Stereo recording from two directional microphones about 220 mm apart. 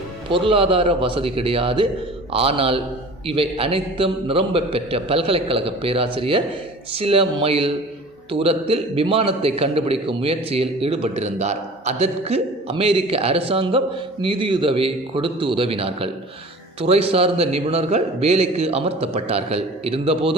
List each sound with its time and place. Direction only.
0.3 s a man's voice: 25° right (ahead or behind)